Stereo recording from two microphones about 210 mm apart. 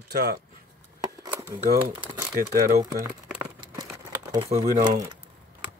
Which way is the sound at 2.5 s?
50° right (ahead or behind).